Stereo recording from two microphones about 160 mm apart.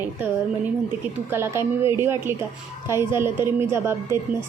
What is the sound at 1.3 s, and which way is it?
A woman's voice, 15° right (ahead or behind).